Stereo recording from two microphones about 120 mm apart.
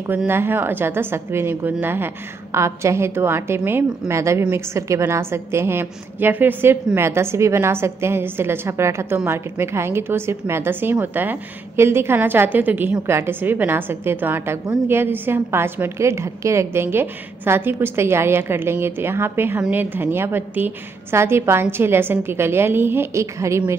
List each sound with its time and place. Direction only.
0.3 s a woman's voice: 20° right (ahead or behind)